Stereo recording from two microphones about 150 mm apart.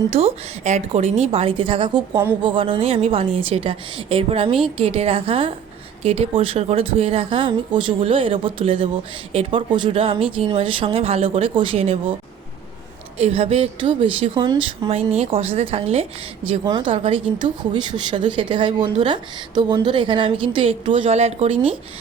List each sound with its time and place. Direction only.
0.1 s speech: 40° right (ahead or behind)
13.1 s speech: 40° right (ahead or behind)